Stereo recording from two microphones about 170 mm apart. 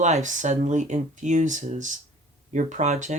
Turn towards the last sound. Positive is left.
turn(degrees=-45)  # may be behind; listen again after turning